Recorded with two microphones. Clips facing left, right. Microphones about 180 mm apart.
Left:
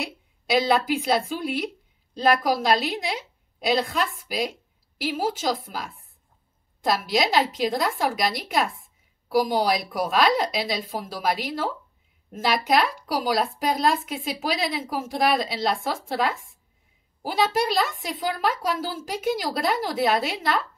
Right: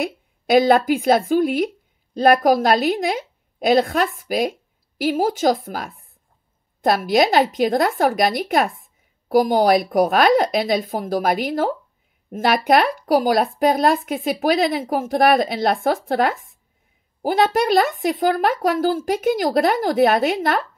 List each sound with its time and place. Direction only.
0.0 s a woman's voice: 55° right (ahead or behind)